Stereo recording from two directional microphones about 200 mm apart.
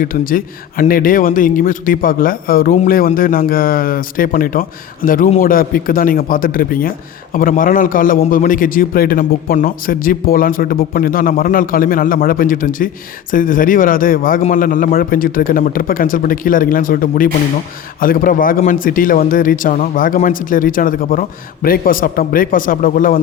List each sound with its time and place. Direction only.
0.0 s a man's voice: 45° left (ahead or behind)